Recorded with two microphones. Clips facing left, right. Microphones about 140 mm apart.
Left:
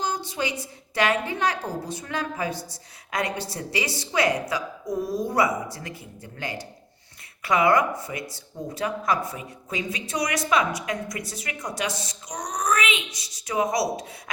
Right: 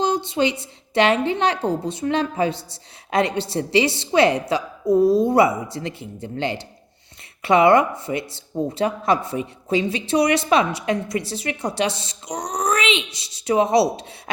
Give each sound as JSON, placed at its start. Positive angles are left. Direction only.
{"t": 0.0, "sound": "a woman's voice", "side_deg": -25}